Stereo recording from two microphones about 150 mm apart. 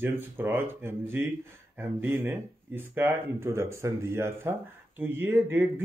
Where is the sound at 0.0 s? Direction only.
15° right (ahead or behind).